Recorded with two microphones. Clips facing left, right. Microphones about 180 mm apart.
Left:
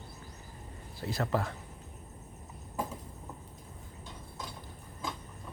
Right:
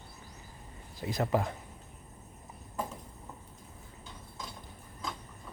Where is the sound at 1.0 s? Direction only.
15° right (ahead or behind).